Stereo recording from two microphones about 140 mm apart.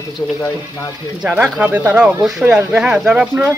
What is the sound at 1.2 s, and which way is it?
Speech, 5° right (ahead or behind).